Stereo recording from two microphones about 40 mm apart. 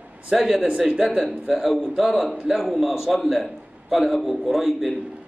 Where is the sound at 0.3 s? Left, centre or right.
Centre.